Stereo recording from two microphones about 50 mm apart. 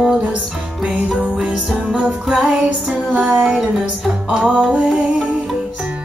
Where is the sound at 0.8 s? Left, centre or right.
Centre.